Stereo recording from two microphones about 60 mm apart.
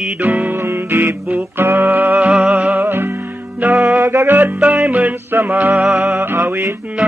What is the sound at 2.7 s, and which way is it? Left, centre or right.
Music, right.